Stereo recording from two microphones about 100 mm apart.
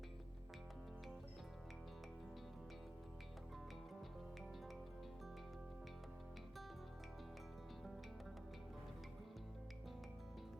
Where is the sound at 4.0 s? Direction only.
Centre (ahead or behind).